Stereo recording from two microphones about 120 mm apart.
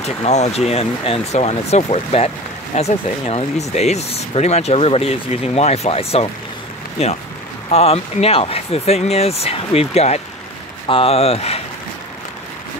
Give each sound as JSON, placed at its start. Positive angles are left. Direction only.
{"t": 0.0, "sound": "speech", "side_deg": 65}